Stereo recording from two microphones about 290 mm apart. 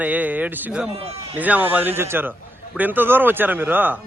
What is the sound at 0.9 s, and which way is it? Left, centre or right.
Speech, right.